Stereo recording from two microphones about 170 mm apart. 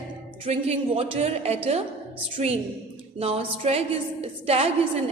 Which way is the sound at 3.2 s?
35° right (ahead or behind).